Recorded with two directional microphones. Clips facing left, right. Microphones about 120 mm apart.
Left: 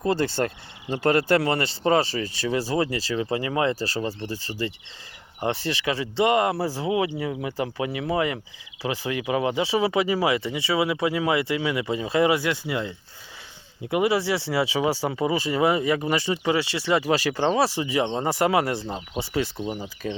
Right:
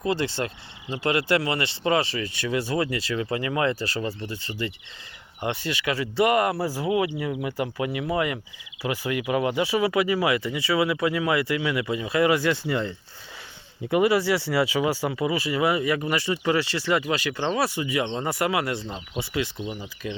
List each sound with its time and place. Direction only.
0.0 s speech: 40° left (ahead or behind)
12.3 s speech: 10° left (ahead or behind)
13.9 s speech: 20° left (ahead or behind)
17.1 s speech: 35° left (ahead or behind)